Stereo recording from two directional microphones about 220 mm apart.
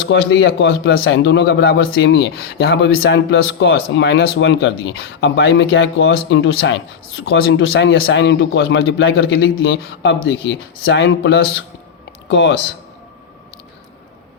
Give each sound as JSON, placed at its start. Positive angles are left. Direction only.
{"t": 0.0, "sound": "a man's voice", "side_deg": 55}